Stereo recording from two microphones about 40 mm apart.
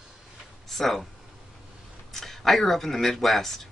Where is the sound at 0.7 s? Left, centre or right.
Centre.